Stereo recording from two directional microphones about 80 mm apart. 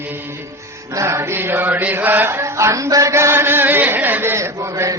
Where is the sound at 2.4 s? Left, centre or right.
Right.